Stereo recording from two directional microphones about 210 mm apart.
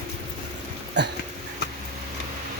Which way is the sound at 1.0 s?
55° right (ahead or behind).